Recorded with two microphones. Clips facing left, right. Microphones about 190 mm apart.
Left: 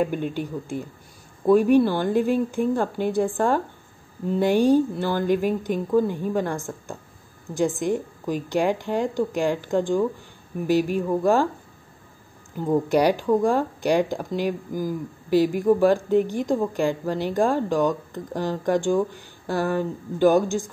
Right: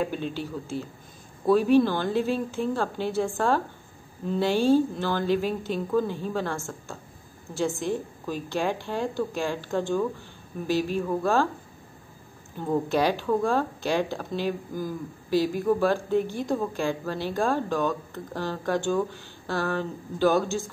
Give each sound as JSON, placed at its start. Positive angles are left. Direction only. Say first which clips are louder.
{"t": 0.3, "sound": "speech", "louder": "left 3 dB", "side_deg": 15}
{"t": 12.5, "sound": "speech", "louder": "left 4 dB", "side_deg": 15}